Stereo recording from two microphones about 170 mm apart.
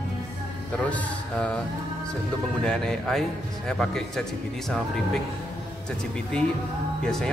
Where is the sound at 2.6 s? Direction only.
5° left (ahead or behind).